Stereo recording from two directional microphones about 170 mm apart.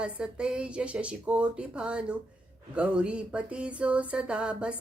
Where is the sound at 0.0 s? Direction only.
5° right (ahead or behind).